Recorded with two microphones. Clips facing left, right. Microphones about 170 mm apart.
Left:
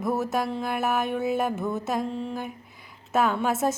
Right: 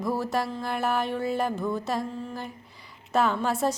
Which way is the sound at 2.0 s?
20° left (ahead or behind).